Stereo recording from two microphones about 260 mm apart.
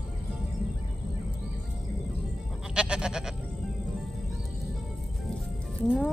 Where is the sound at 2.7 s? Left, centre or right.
Centre.